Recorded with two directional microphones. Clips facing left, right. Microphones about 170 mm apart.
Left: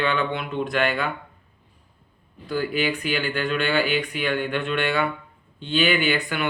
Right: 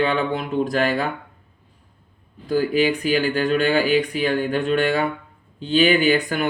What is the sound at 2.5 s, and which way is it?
Speech, 40° right (ahead or behind).